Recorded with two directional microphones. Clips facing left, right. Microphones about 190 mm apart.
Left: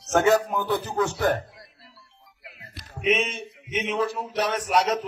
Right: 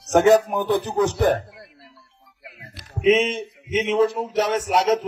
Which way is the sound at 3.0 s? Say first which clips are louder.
Right 7 dB; 30° right (ahead or behind).